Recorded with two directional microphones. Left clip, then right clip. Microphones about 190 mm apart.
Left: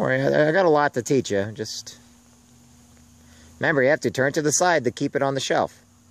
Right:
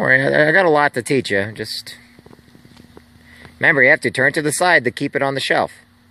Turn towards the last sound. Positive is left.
turn(degrees=0)  # may be behind; listen again after turning